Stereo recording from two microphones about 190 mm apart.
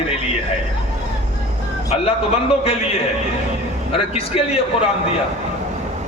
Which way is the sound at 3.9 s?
30° left (ahead or behind).